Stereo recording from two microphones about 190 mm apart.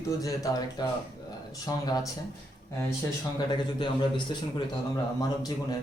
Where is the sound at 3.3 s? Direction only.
25° left (ahead or behind).